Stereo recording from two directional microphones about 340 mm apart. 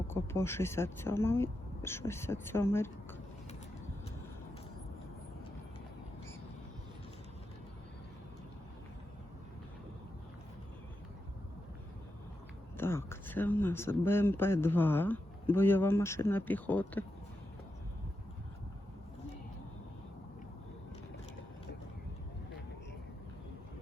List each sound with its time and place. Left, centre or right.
0.1 s speech: centre
12.7 s speech: centre